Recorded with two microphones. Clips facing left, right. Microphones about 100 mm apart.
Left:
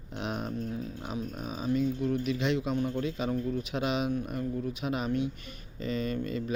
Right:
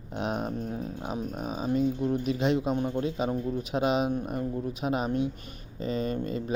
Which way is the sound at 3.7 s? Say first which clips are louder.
Right 6 dB; 35° right (ahead or behind).